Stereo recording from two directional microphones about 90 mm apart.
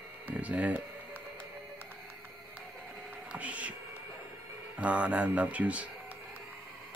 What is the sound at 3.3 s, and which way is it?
Music, 15° right (ahead or behind).